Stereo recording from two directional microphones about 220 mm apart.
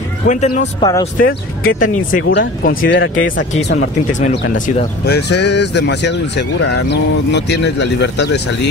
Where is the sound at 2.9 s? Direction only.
60° left (ahead or behind).